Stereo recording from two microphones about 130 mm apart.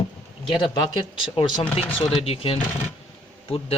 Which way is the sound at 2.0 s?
45° left (ahead or behind).